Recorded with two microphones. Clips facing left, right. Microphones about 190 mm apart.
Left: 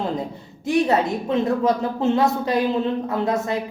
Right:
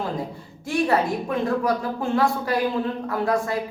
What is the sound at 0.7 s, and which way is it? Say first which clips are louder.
A woman's voice: left 2 dB; 20° left (ahead or behind).